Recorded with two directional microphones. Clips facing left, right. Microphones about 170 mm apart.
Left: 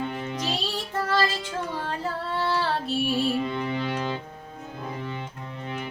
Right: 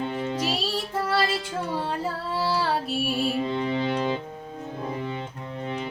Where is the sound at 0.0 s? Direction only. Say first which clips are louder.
Right 3 dB; 30° right (ahead or behind).